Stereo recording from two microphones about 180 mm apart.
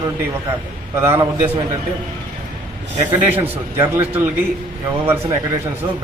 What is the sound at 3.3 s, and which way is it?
Speech, 10° right (ahead or behind).